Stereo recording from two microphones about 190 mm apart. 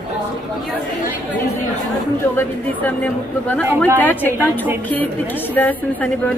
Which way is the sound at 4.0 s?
10° left (ahead or behind).